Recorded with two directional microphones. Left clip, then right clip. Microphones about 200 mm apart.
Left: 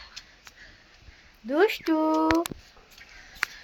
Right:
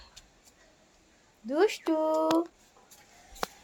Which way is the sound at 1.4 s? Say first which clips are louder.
Left 3 dB; 30° left (ahead or behind).